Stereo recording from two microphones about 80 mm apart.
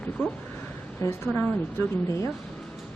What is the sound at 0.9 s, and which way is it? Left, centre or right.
A woman's voice, left.